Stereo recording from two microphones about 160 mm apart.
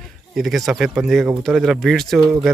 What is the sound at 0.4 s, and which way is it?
Speech, centre (ahead or behind).